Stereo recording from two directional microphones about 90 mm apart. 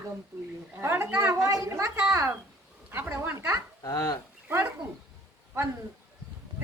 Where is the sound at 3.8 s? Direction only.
45° left (ahead or behind).